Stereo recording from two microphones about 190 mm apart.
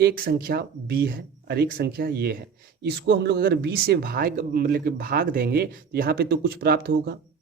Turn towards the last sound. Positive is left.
turn(degrees=-55)  # may be behind; listen again after turning